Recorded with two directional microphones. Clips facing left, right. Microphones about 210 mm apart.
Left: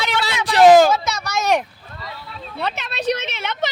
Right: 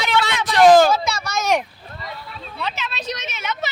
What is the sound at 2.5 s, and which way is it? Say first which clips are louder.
A woman's voice: left 3 dB; 55° left (ahead or behind).